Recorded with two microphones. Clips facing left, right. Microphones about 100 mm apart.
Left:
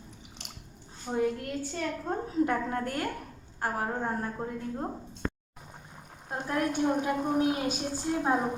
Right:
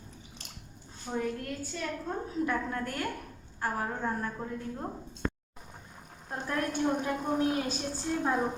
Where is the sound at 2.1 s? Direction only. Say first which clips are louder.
Left 4 dB; 35° left (ahead or behind).